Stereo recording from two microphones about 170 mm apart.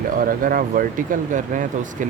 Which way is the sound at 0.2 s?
55° right (ahead or behind).